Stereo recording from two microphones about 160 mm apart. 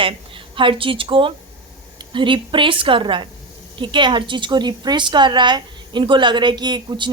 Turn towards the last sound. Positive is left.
turn(degrees=-30)  # may be behind; listen again after turning